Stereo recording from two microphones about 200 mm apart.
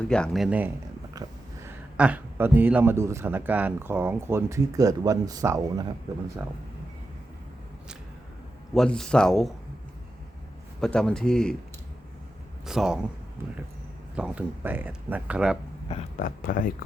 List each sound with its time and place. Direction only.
0.0 s speech: 5° left (ahead or behind)
1.1 s a sound: 20° right (ahead or behind)
2.0 s speech: 5° right (ahead or behind)
8.7 s speech: centre (ahead or behind)
10.8 s speech: 5° left (ahead or behind)
12.6 s speech: 5° right (ahead or behind)
14.2 s speech: 5° right (ahead or behind)
16.1 s speech: 40° left (ahead or behind)